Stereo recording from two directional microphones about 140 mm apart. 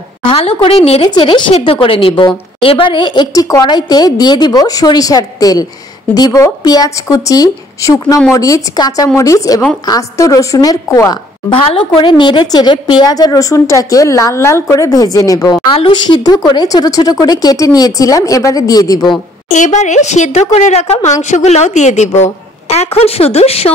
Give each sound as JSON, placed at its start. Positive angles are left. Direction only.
{"t": 0.2, "sound": "a woman's voice", "side_deg": 40}
{"t": 1.0, "sound": "a woman's voice", "side_deg": 35}
{"t": 11.5, "sound": "a woman's voice", "side_deg": 45}
{"t": 15.7, "sound": "speech", "side_deg": 40}
{"t": 19.5, "sound": "a woman's voice", "side_deg": 60}